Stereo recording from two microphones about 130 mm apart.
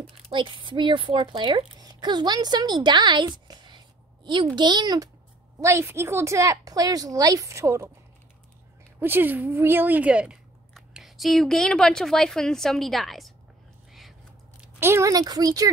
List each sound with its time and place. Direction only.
0.3 s speech: 40° right (ahead or behind)
1.8 s a sound: 30° right (ahead or behind)
4.6 s speech: 35° right (ahead or behind)
9.0 s a woman's voice: 15° right (ahead or behind); by 13.3 s centre (ahead or behind)
14.8 s speech: 20° right (ahead or behind)